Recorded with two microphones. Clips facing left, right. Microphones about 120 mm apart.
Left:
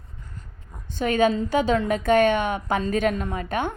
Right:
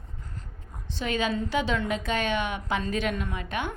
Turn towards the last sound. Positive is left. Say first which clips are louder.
# left 5 dB
turn(degrees=45)  # may be behind; listen again after turning